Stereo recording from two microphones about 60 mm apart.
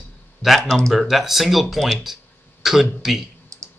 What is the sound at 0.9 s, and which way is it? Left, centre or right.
Speech, centre.